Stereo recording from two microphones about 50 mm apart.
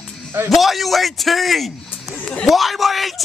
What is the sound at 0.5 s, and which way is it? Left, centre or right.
A man's voice, centre.